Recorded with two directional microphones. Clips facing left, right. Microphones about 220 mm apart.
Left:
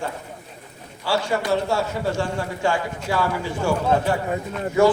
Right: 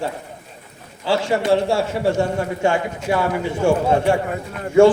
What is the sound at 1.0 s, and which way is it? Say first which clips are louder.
A man's voice: right 4 dB; 25° right (ahead or behind).